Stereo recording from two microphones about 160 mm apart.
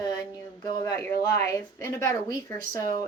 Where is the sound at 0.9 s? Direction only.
15° left (ahead or behind).